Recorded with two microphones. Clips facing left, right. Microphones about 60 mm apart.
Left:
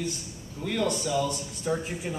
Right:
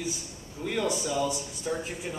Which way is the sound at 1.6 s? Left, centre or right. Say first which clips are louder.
Left 3 dB; centre.